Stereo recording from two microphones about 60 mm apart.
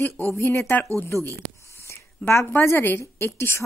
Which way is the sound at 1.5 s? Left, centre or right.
Left.